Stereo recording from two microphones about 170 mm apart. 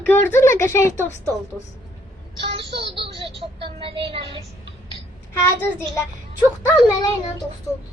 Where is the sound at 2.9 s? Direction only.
30° right (ahead or behind).